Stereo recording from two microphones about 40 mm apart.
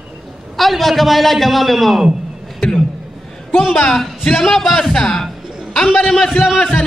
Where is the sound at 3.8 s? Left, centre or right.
Centre.